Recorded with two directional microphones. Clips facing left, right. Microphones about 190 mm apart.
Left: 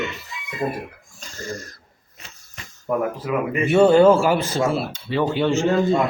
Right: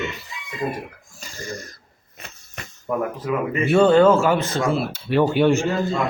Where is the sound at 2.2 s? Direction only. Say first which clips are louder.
Right 5 dB; 55° right (ahead or behind).